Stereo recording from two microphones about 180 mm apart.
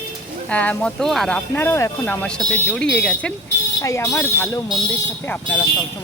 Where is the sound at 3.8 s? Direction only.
20° left (ahead or behind).